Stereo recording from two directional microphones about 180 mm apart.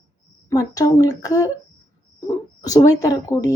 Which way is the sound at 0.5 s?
20° left (ahead or behind).